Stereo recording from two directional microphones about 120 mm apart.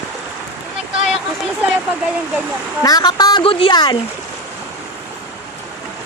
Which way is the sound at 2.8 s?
35° left (ahead or behind).